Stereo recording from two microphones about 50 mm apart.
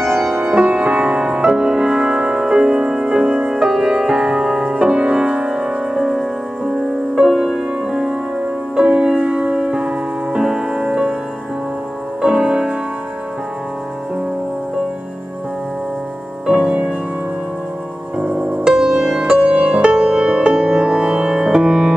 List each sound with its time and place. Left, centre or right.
0.5 s music: right
12.2 s music: centre
16.4 s music: right
18.2 s music: right
19.2 s music: right